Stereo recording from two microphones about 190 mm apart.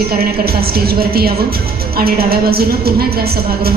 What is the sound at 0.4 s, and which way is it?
Speech, 55° right (ahead or behind).